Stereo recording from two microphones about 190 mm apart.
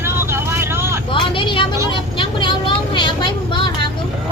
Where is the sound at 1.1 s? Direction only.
25° left (ahead or behind).